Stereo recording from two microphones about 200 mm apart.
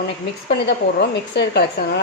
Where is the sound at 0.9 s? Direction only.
55° left (ahead or behind).